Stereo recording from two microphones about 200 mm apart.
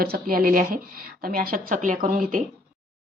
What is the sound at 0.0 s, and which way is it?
Speech, 45° right (ahead or behind).